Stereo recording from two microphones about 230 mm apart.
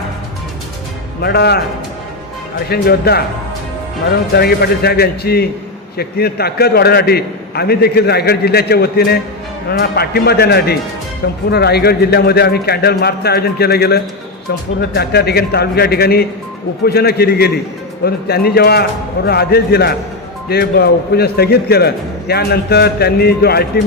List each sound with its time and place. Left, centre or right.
1.2 s a man's voice: left
2.6 s a man's voice: left
4.4 s a man's voice: left